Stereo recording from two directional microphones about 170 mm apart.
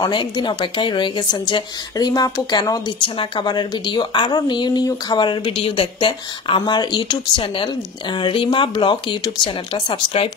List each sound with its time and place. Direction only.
0.0 s a woman's voice: 25° left (ahead or behind)